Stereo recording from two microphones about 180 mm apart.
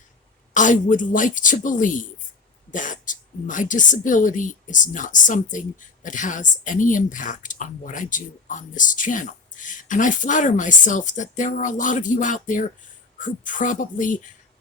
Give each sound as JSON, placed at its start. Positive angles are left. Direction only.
{"t": 0.5, "sound": "speech", "side_deg": 45}